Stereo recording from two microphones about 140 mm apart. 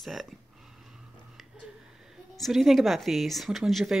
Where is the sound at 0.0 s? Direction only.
Centre (ahead or behind).